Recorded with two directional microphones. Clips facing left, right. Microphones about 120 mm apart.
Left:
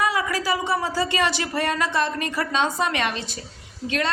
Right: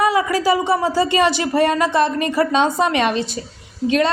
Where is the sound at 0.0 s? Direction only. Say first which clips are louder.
Right 7 dB; 20° right (ahead or behind).